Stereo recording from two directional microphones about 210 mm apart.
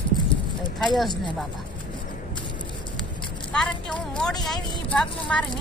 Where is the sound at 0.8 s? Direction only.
Centre (ahead or behind).